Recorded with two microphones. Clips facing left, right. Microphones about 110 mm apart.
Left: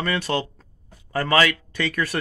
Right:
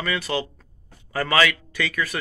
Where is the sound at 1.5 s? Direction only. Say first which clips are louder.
Left 2 dB; 45° left (ahead or behind).